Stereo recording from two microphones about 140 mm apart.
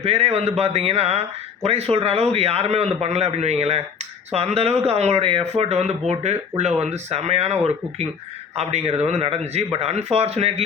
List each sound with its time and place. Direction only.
0.0 s speech: 45° right (ahead or behind)